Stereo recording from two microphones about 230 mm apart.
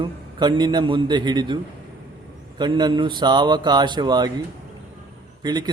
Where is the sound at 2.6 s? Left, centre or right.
Centre.